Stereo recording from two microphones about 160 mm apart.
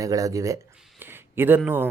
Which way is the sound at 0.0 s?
20° right (ahead or behind).